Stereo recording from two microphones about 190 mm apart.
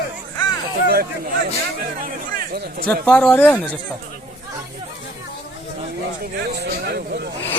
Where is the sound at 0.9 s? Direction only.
55° right (ahead or behind).